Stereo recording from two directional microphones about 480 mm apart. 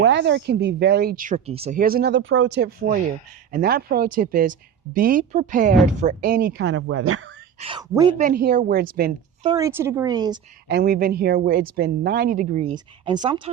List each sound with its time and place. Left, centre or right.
0.0 s speech: right
7.6 s speech: centre
10.7 s speech: centre